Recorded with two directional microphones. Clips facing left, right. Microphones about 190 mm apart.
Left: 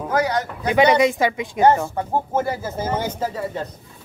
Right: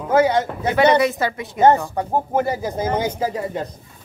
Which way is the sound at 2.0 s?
15° right (ahead or behind).